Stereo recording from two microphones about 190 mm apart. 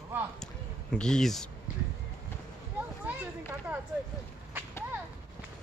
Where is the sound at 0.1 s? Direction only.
10° right (ahead or behind).